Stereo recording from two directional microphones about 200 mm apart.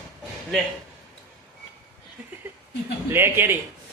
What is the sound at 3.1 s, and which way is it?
Speech, 10° right (ahead or behind).